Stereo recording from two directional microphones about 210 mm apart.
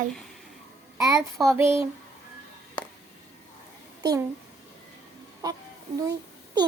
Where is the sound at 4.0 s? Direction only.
15° right (ahead or behind).